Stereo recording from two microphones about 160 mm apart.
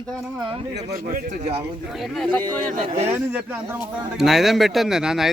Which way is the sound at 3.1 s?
10° right (ahead or behind).